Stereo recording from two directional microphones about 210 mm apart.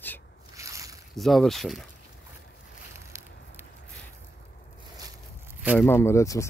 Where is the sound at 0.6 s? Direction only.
15° right (ahead or behind).